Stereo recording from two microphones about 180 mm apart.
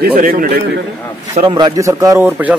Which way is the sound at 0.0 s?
55° right (ahead or behind).